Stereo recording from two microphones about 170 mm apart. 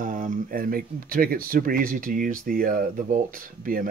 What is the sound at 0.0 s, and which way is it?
Speech, 50° right (ahead or behind).